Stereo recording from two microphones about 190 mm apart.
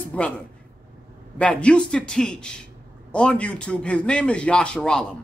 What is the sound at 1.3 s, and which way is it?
A man's voice, 5° left (ahead or behind).